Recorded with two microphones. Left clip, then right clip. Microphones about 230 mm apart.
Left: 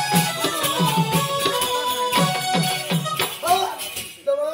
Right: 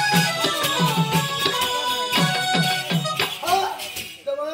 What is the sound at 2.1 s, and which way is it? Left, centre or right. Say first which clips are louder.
Music: right 2 dB; centre.